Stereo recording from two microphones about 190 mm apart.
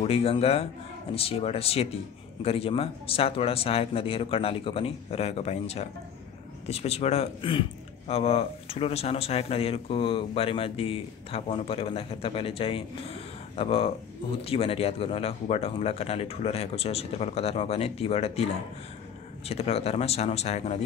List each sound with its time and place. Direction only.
0.0 s speech: 30° left (ahead or behind)